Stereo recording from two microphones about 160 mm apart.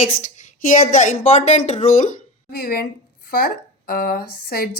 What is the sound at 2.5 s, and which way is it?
Speech, 70° left (ahead or behind).